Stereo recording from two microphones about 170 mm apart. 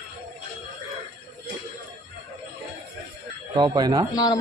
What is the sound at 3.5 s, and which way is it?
Speech, 25° right (ahead or behind).